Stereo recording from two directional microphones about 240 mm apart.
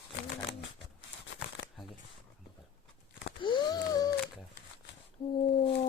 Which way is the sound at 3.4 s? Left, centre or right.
Centre.